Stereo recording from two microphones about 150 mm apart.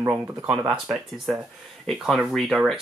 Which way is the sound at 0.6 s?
5° right (ahead or behind).